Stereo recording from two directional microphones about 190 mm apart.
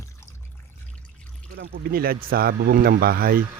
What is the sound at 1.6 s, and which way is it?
Speech, 55° right (ahead or behind).